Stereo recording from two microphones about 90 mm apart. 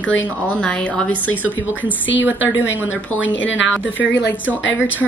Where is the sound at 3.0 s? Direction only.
20° left (ahead or behind).